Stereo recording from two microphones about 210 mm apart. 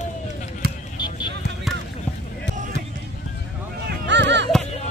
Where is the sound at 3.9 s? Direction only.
60° right (ahead or behind).